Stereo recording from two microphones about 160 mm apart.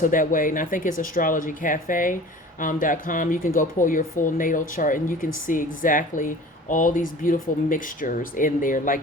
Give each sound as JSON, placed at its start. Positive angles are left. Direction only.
{"t": 0.0, "sound": "speech", "side_deg": 55}